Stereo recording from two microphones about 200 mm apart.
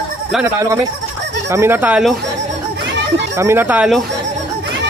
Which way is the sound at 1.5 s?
15° right (ahead or behind).